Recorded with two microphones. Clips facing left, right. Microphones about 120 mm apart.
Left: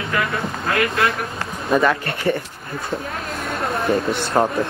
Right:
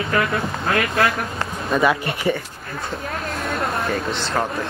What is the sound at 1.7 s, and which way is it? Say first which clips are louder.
Speech: left 2 dB; 5° left (ahead or behind).